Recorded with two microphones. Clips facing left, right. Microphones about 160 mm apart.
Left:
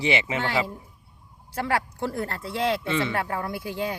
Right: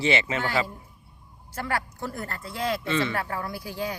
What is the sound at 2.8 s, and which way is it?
Speech, 20° left (ahead or behind).